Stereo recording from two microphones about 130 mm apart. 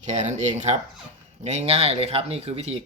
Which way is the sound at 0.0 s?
60° right (ahead or behind).